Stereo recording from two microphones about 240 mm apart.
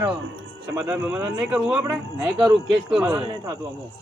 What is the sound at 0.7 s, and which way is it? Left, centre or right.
Speech, centre.